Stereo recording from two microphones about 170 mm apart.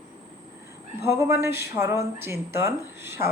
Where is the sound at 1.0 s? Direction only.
15° right (ahead or behind).